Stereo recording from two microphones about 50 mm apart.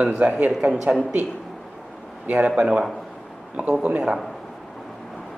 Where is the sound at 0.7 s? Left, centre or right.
Centre.